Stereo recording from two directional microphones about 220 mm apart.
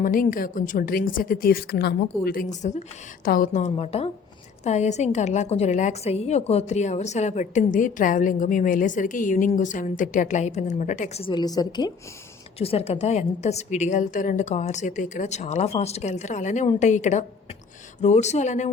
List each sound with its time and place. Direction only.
0.0 s a woman's voice: 40° left (ahead or behind)